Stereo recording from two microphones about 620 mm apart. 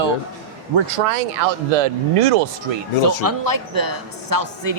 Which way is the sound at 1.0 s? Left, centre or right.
Right.